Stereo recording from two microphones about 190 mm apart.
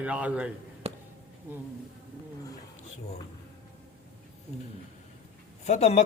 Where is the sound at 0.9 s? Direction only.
35° right (ahead or behind).